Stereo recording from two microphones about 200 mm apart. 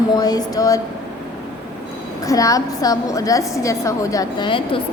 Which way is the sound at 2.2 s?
15° left (ahead or behind).